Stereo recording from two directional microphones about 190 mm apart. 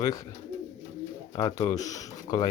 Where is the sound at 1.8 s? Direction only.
20° left (ahead or behind).